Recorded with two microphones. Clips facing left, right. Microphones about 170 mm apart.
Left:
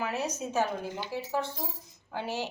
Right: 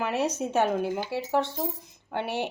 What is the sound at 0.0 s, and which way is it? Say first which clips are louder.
Speech: right 5 dB; 65° right (ahead or behind).